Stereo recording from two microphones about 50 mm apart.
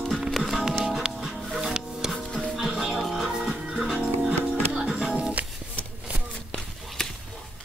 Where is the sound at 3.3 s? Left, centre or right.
Centre.